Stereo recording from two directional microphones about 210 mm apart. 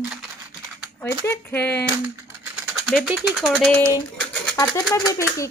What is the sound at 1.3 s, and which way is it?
Speech, 10° left (ahead or behind).